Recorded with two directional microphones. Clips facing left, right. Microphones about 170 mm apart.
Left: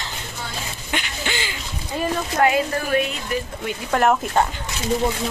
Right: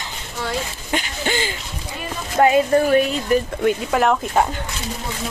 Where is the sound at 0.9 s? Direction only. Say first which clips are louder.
Right 5 dB; 40° right (ahead or behind).